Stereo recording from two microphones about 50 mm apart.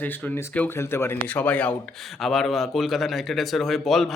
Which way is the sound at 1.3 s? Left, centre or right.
Left.